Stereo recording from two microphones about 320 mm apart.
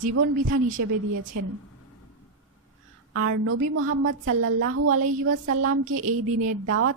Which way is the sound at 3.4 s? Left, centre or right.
Right.